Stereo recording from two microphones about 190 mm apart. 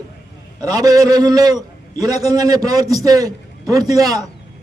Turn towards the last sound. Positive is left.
turn(degrees=-20)  # may be behind; listen again after turning